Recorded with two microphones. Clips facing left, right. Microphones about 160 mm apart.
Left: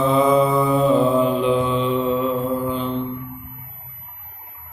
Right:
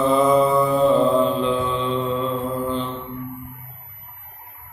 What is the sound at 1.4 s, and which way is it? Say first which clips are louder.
Mantra: left 3 dB; 15° left (ahead or behind).